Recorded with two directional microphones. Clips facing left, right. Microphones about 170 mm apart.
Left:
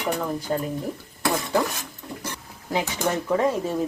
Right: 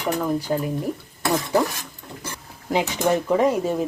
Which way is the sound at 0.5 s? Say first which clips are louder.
Left 1 dB; centre (ahead or behind).